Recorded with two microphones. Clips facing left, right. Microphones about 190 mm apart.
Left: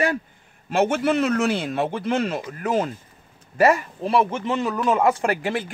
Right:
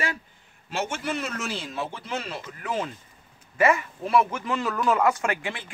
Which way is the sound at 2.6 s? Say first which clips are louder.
Left 6 dB; 45° left (ahead or behind).